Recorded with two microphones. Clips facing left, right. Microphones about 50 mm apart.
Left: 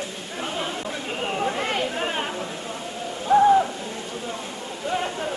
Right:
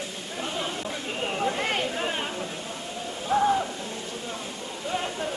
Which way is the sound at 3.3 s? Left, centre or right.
Centre.